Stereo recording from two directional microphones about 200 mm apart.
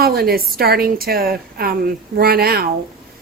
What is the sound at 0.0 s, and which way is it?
A woman's voice, 50° right (ahead or behind).